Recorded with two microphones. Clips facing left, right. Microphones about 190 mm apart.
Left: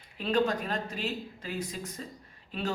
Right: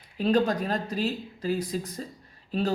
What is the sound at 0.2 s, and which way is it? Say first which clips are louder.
Speech: right 4 dB; 40° right (ahead or behind).